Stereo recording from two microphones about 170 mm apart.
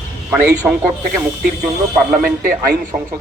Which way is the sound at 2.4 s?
60° right (ahead or behind).